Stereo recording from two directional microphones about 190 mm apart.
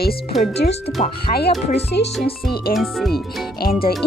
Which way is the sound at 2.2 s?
55° left (ahead or behind).